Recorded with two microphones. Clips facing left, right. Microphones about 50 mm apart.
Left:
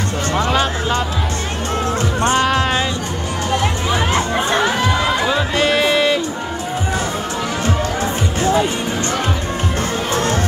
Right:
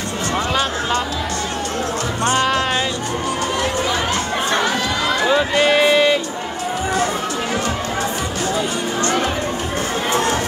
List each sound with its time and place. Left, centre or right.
2.4 s speech: centre
5.2 s music: centre
10.1 s music: right